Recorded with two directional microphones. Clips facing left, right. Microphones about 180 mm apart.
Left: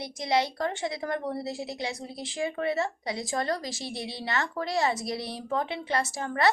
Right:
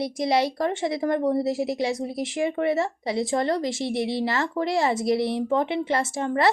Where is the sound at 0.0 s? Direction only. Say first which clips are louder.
Right 5 dB; 25° right (ahead or behind).